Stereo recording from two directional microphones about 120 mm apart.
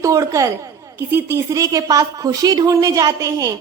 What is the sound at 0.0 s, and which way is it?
A woman's voice, 25° right (ahead or behind).